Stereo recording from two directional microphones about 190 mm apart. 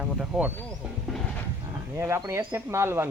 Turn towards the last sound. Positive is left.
turn(degrees=-10)  # may be behind; listen again after turning